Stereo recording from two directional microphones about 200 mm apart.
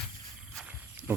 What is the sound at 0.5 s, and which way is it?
Cricket, 10° right (ahead or behind).